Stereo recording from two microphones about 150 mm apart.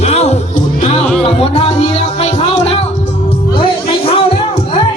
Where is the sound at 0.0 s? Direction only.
45° left (ahead or behind).